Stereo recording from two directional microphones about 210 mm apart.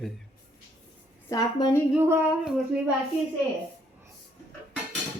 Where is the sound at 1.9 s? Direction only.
10° right (ahead or behind).